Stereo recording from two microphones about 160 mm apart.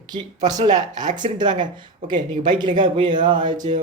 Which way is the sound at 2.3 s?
55° right (ahead or behind).